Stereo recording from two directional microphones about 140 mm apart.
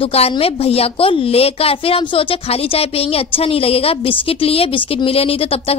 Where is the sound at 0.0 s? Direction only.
45° left (ahead or behind).